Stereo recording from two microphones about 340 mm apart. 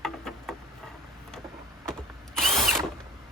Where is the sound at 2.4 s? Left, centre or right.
Centre.